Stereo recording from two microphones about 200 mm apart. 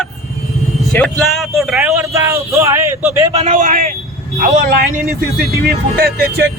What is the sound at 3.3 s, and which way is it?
A man's voice, 30° right (ahead or behind).